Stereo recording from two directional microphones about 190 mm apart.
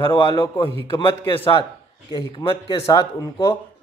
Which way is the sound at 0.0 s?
25° left (ahead or behind).